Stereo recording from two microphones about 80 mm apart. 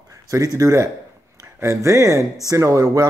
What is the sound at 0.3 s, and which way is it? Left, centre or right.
Speech, right.